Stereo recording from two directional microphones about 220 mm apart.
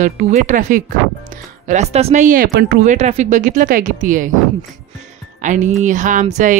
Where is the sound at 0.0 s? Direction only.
35° right (ahead or behind).